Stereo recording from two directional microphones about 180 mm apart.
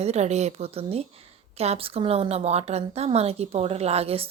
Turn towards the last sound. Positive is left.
turn(degrees=-35)  # may be behind; listen again after turning